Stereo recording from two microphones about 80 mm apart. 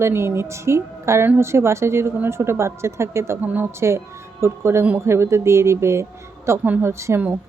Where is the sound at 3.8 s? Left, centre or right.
Right.